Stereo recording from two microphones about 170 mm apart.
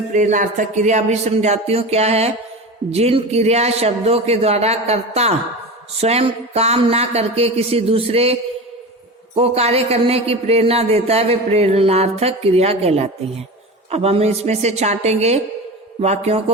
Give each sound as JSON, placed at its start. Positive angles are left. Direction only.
{"t": 0.1, "sound": "speech", "side_deg": -50}